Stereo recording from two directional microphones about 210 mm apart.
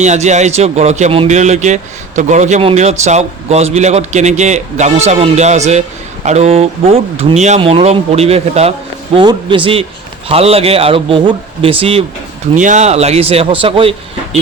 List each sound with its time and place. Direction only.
0.0 s speech: 35° right (ahead or behind)